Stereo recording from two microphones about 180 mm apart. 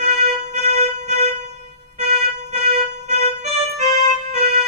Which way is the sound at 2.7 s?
40° right (ahead or behind).